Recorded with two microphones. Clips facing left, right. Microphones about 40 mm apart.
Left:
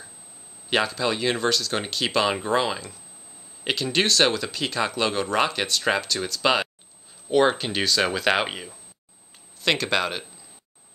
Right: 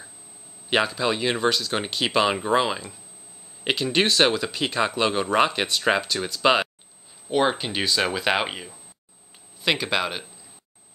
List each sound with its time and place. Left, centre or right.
0.7 s speech: centre
7.2 s speech: centre